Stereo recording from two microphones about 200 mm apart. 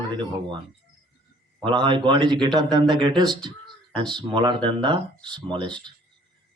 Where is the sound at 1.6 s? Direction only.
25° right (ahead or behind).